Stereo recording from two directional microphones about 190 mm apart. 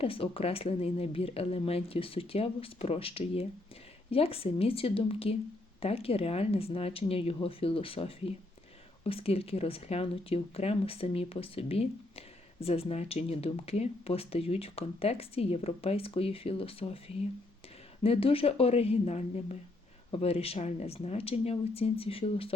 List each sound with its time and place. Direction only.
0.0 s speech: 30° left (ahead or behind)
18.0 s speech: 30° left (ahead or behind)